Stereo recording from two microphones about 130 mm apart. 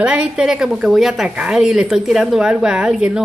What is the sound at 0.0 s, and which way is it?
A woman's voice, 10° right (ahead or behind).